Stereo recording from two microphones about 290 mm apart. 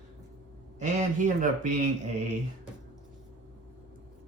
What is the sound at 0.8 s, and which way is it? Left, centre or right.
Speech, right.